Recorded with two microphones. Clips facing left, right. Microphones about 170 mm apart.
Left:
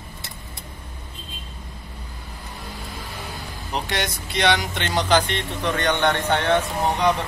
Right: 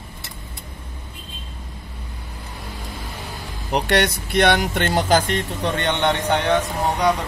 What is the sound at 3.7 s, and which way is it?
Speech, 65° right (ahead or behind).